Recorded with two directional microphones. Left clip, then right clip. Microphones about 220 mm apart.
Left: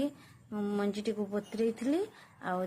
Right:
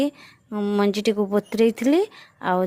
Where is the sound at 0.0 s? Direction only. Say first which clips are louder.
Right 11 dB; 40° right (ahead or behind).